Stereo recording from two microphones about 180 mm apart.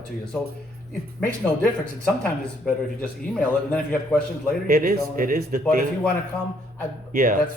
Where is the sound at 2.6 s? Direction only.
5° left (ahead or behind).